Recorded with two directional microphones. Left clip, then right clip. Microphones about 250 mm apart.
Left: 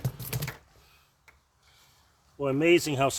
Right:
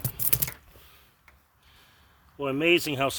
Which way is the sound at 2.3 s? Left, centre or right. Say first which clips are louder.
Even; right.